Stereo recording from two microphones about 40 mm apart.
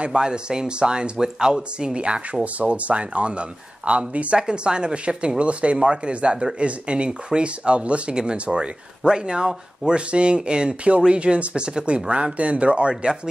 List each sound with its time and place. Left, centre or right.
0.0 s speech: right
4.4 s speech: right
7.4 s speech: right